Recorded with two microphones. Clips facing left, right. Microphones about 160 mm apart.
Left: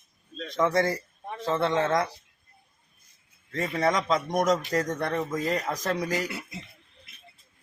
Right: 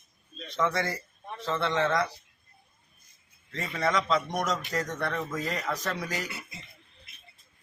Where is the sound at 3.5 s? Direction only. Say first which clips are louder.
Left 3 dB; 45° left (ahead or behind).